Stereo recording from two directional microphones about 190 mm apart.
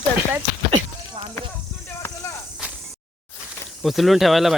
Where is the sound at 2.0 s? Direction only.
15° left (ahead or behind).